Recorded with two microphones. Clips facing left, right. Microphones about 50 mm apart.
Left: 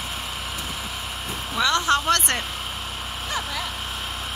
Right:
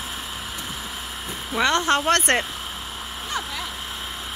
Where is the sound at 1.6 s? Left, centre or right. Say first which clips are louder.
Right 1 dB; right.